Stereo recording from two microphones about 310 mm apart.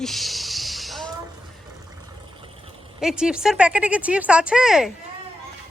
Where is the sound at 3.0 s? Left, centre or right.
Centre.